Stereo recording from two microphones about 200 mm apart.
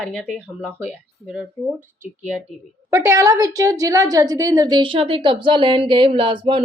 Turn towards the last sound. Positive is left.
turn(degrees=-25)  # may be behind; listen again after turning